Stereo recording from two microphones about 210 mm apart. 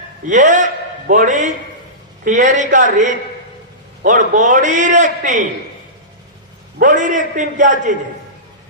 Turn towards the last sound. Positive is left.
turn(degrees=-35)  # may be behind; listen again after turning